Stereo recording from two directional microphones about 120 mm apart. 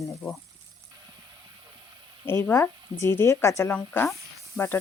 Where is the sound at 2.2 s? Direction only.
20° left (ahead or behind).